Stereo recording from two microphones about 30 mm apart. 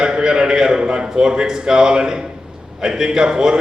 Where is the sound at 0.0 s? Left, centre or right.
Right.